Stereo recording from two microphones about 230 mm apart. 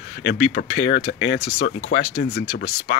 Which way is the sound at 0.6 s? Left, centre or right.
Left.